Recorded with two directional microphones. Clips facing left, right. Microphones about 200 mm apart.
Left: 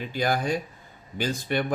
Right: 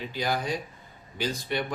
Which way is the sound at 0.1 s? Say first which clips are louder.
Left 4 dB; 50° left (ahead or behind).